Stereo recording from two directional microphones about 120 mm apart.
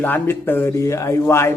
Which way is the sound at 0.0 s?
15° left (ahead or behind).